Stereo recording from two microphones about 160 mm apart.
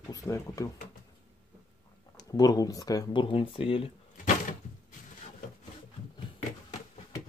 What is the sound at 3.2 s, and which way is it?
Speech, 35° left (ahead or behind).